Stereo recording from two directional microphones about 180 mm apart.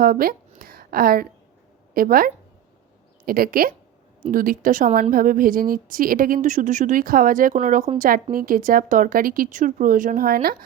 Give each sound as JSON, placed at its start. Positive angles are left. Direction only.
{"t": 0.0, "sound": "a woman's voice", "side_deg": -55}